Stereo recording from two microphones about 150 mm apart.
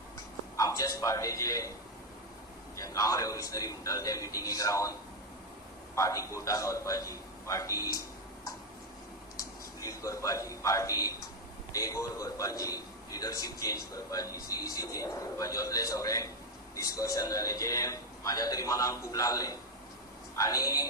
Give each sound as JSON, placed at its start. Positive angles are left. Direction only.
{"t": 0.5, "sound": "a man's voice", "side_deg": 25}
{"t": 2.7, "sound": "a man's voice", "side_deg": 20}
{"t": 6.0, "sound": "a man's voice", "side_deg": 20}
{"t": 9.4, "sound": "a man's voice", "side_deg": 20}